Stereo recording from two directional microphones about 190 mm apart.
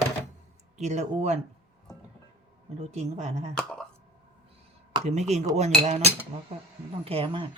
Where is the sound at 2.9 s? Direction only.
35° right (ahead or behind).